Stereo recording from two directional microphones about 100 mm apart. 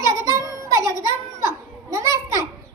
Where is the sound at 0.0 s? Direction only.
30° right (ahead or behind).